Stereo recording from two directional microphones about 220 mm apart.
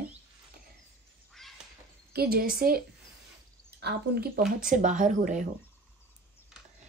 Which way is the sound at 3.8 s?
45° right (ahead or behind).